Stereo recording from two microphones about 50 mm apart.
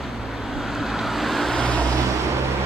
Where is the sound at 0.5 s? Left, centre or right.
Centre.